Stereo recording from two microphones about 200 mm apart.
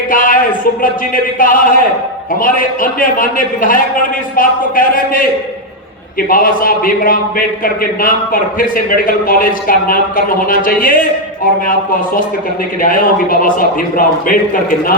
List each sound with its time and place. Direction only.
0.1 s a man's voice: 45° left (ahead or behind)